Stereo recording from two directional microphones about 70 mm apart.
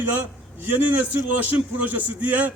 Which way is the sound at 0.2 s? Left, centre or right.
Right.